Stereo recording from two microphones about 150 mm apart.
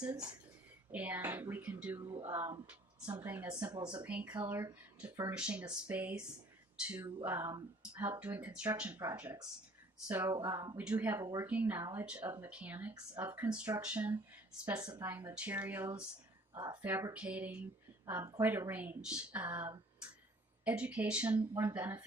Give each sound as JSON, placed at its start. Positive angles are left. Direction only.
{"t": 0.0, "sound": "speech", "side_deg": -10}
{"t": 3.5, "sound": "speech", "side_deg": -30}
{"t": 4.0, "sound": "speech", "side_deg": -10}
{"t": 16.6, "sound": "speech", "side_deg": -25}
{"t": 16.8, "sound": "speech", "side_deg": -15}
{"t": 18.0, "sound": "speech", "side_deg": -20}